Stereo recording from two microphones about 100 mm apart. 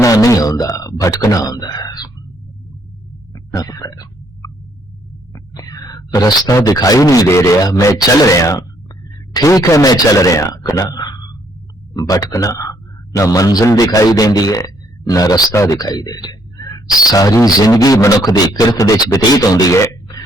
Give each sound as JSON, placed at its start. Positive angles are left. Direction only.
{"t": 0.0, "sound": "a man's voice", "side_deg": 35}
{"t": 3.5, "sound": "throat clearing", "side_deg": 40}
{"t": 5.3, "sound": "a sound", "side_deg": 35}
{"t": 6.7, "sound": "speech", "side_deg": 35}
{"t": 12.0, "sound": "speech", "side_deg": 30}